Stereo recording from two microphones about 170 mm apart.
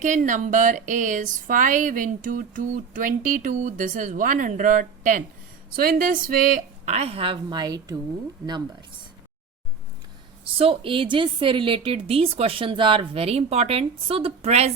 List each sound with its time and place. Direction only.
0.0 s speech: 45° right (ahead or behind); by 7.9 s 20° right (ahead or behind)
10.4 s a woman's voice: 30° right (ahead or behind)